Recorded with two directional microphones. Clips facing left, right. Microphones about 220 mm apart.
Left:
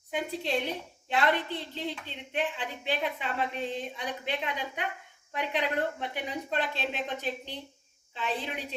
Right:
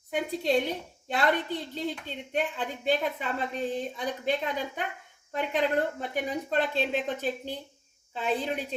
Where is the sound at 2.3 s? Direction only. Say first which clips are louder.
Right 2 dB; 45° right (ahead or behind).